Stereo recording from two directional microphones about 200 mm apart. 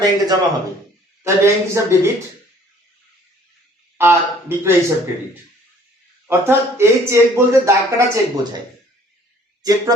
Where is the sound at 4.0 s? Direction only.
10° right (ahead or behind).